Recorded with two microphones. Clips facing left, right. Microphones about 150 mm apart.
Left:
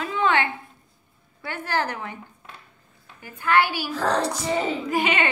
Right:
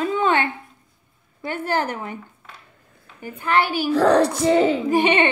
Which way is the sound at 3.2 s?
20° right (ahead or behind).